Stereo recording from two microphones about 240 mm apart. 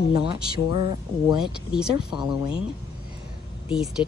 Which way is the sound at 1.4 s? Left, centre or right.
Centre.